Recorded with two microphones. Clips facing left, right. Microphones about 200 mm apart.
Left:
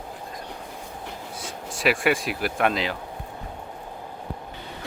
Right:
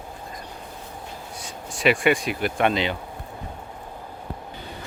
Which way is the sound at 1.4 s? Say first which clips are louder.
Right 2 dB; centre (ahead or behind).